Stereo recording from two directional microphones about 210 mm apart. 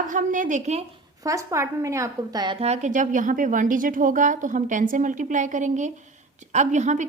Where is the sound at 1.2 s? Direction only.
15° right (ahead or behind).